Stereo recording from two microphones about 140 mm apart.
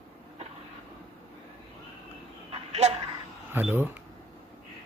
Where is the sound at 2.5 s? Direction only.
50° right (ahead or behind).